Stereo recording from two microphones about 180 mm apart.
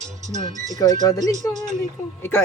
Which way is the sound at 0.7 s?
20° left (ahead or behind).